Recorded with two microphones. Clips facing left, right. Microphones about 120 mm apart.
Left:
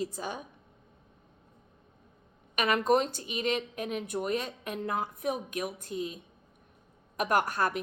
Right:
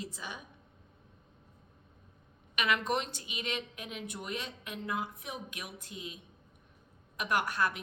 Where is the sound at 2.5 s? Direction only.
40° left (ahead or behind).